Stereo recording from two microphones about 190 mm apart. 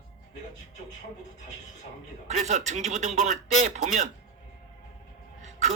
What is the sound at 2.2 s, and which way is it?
Speech, 35° right (ahead or behind).